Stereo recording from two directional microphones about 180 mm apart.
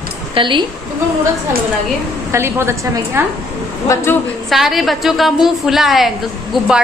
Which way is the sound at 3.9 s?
15° left (ahead or behind).